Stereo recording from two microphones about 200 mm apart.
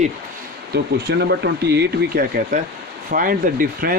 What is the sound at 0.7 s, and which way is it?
Speech, 55° right (ahead or behind).